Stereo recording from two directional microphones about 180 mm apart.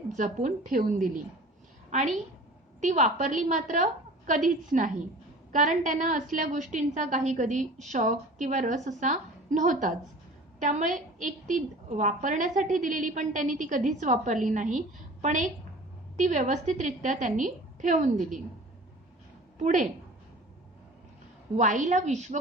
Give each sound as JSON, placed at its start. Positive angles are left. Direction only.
{"t": 0.1, "sound": "a woman's voice", "side_deg": -45}
{"t": 2.8, "sound": "a woman's voice", "side_deg": -40}
{"t": 19.5, "sound": "a woman's voice", "side_deg": -45}
{"t": 21.5, "sound": "a woman's voice", "side_deg": -45}